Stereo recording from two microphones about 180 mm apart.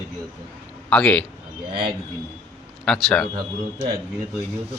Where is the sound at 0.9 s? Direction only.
5° left (ahead or behind).